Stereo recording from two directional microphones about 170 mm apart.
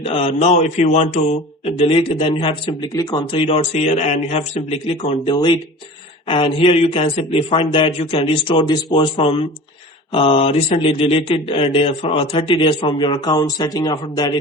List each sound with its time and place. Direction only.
0.0 s speech: 35° left (ahead or behind)
3.4 s speech: 40° left (ahead or behind); by 14.3 s 25° left (ahead or behind)